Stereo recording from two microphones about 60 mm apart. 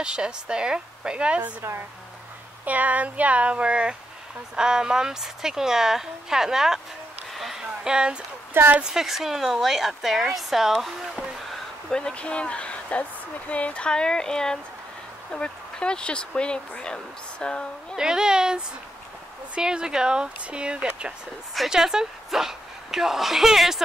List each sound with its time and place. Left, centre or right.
0.0 s a woman's voice: centre
1.6 s speech: right
2.6 s a woman's voice: right; by 6.8 s centre
7.3 s a sound: centre
8.7 s speech: centre
11.9 s speech: centre
17.9 s a woman's voice: centre